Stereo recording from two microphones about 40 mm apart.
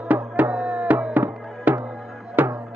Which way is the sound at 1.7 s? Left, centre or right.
Right.